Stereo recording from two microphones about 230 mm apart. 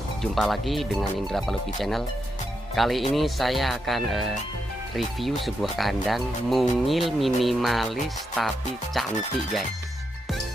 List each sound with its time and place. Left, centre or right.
0.2 s speech: centre